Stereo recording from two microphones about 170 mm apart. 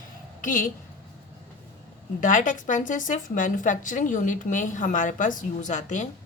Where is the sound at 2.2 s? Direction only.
45° left (ahead or behind).